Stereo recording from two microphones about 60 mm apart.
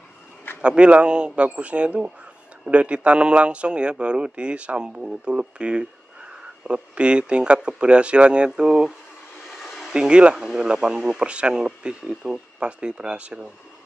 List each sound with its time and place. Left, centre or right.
0.6 s a man's voice: centre
9.6 s a sound: centre
9.9 s speech: centre